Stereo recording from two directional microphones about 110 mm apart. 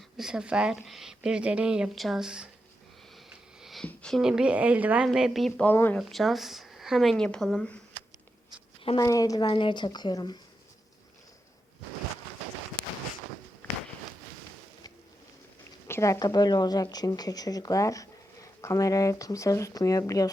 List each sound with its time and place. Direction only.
0.2 s speech: 5° right (ahead or behind)
3.6 s a sound: centre (ahead or behind)
3.8 s speech: 5° left (ahead or behind)
4.2 s speech: 5° right (ahead or behind)
5.6 s speech: 15° left (ahead or behind)
6.0 s speech: centre (ahead or behind)
9.0 s speech: 30° left (ahead or behind)
9.5 s speech: 50° left (ahead or behind)
13.6 s walk: 15° left (ahead or behind)
15.9 s speech: 25° left (ahead or behind)